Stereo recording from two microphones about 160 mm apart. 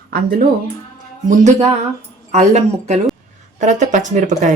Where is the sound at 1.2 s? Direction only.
50° right (ahead or behind).